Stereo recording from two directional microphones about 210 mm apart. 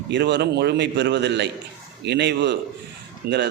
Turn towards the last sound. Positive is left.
turn(degrees=-55)  # may be behind; listen again after turning